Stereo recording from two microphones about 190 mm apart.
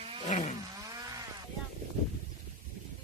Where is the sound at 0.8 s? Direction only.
20° right (ahead or behind).